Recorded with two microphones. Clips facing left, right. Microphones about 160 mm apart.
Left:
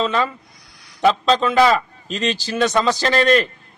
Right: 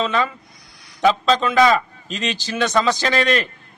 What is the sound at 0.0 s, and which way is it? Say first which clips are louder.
A man's voice: left 1 dB; centre (ahead or behind).